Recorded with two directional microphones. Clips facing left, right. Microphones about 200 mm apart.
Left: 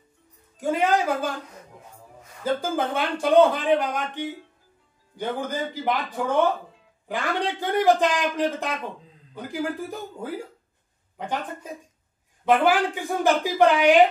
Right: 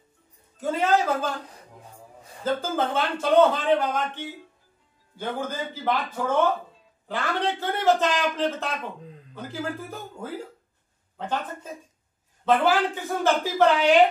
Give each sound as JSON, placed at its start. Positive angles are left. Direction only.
{"t": 0.6, "sound": "a man's voice", "side_deg": 15}
{"t": 2.4, "sound": "a man's voice", "side_deg": 15}
{"t": 7.1, "sound": "a man's voice", "side_deg": 15}